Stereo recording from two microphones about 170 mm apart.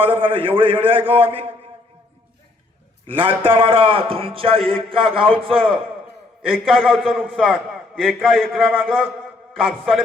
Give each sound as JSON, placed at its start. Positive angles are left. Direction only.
{"t": 0.0, "sound": "a man's voice", "side_deg": -30}
{"t": 3.1, "sound": "a man's voice", "side_deg": -30}
{"t": 6.5, "sound": "a man's voice", "side_deg": 0}